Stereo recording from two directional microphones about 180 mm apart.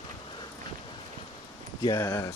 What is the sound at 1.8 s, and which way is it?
Speech, 20° left (ahead or behind).